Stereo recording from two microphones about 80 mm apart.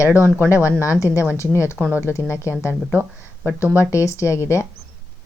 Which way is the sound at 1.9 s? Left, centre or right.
Right.